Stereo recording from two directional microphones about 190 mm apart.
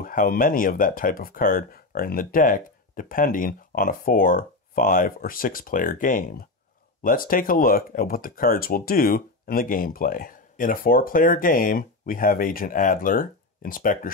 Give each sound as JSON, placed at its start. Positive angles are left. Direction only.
{"t": 0.0, "sound": "speech", "side_deg": 50}